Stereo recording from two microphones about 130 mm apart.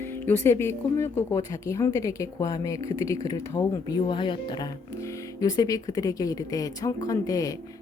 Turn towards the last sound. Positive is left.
turn(degrees=25)  # may be behind; listen again after turning